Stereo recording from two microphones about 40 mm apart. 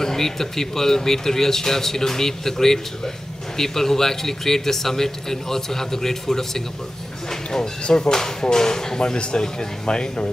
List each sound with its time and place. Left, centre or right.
0.0 s a man's voice: centre